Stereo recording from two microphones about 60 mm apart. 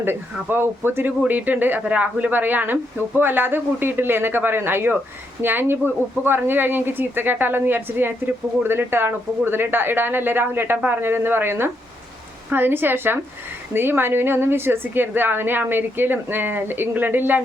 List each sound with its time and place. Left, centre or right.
0.0 s a woman's voice: right